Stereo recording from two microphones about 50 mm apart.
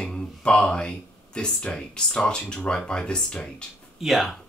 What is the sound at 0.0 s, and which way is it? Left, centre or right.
Speech, left.